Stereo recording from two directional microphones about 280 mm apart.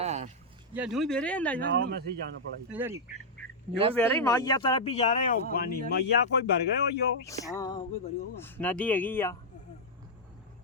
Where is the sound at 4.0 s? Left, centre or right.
Centre; by 5.8 s left.